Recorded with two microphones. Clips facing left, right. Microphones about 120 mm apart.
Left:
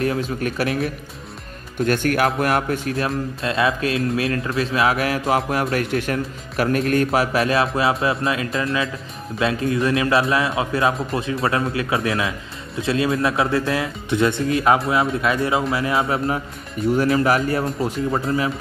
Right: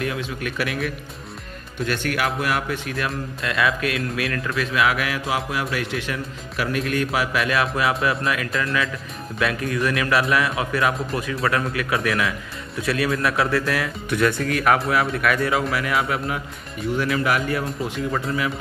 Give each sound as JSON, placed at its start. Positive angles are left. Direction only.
{"t": 0.0, "sound": "speech", "side_deg": 40}